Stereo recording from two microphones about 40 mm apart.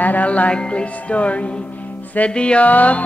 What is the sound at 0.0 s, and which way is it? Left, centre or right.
Music, left.